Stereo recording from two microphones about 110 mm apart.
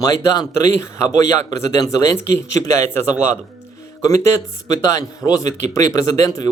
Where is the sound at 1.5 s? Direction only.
30° left (ahead or behind).